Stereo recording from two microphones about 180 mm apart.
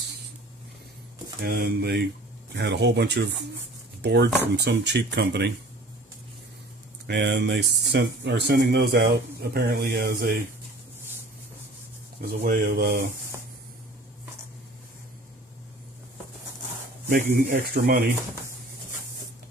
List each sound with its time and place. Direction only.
1.4 s speech: 60° right (ahead or behind)
2.5 s speech: 70° right (ahead or behind)
7.1 s speech: 70° right (ahead or behind); by 10.4 s 55° right (ahead or behind)
12.2 s speech: 55° right (ahead or behind)
17.1 s speech: 45° right (ahead or behind)